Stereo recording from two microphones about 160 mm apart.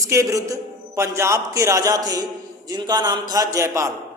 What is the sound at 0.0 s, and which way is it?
A man's voice, 20° right (ahead or behind).